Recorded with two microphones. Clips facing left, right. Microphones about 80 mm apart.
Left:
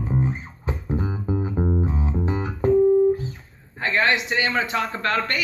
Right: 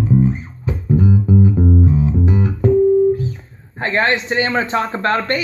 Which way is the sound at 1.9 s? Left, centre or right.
Left.